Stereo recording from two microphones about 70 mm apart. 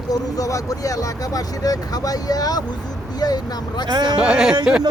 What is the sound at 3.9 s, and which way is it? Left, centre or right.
Speech, right.